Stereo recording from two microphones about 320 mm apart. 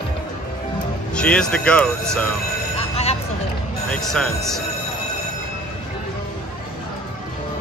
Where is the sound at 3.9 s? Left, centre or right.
Centre.